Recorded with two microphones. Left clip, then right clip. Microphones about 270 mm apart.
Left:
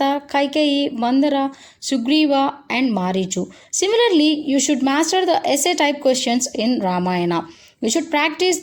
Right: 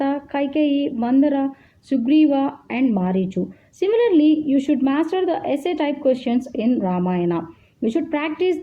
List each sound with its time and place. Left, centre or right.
0.0 s speech: right